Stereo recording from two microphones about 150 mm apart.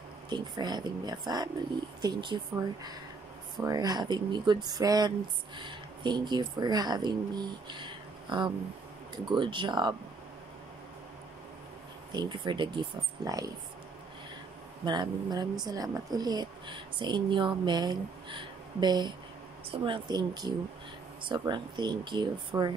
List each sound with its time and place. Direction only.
0.3 s speech: 30° right (ahead or behind)
12.1 s speech: 30° right (ahead or behind)
14.9 s speech: 30° right (ahead or behind)